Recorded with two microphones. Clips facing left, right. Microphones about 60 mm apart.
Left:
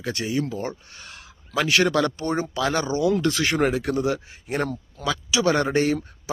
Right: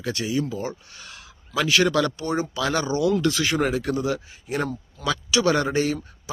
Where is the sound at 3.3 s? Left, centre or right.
Left.